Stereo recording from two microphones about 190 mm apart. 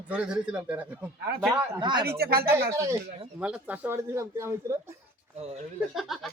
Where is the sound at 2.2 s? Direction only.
55° right (ahead or behind).